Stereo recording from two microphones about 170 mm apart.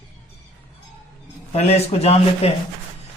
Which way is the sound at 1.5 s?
40° left (ahead or behind).